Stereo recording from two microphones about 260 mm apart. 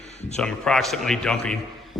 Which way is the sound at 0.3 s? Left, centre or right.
Centre.